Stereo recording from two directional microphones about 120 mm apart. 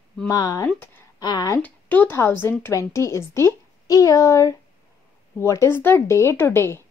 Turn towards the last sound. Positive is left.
turn(degrees=20)  # may be behind; listen again after turning